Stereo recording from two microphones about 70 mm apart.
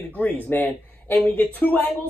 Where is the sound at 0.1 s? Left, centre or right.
Left.